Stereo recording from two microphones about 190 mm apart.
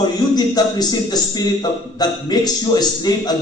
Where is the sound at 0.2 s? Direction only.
20° left (ahead or behind).